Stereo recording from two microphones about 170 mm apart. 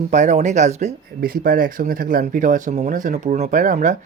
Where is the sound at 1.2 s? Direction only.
60° right (ahead or behind).